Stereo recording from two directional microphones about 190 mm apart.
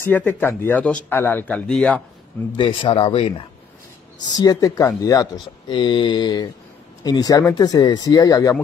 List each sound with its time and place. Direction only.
0.0 s speech: 10° left (ahead or behind)
2.5 s speech: 25° left (ahead or behind)
4.3 s speech: 20° left (ahead or behind)